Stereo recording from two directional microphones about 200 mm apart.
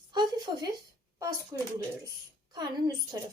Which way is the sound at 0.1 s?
20° right (ahead or behind).